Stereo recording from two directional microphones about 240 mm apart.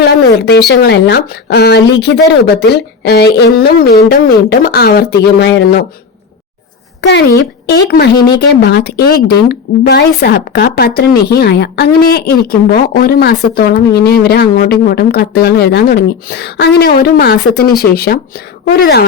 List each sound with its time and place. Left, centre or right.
0.0 s speech: left
7.0 s speech: left